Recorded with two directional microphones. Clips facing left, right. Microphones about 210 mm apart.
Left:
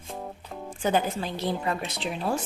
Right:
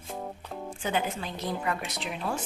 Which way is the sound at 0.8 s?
40° left (ahead or behind).